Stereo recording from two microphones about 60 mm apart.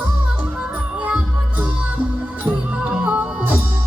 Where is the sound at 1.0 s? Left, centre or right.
Right.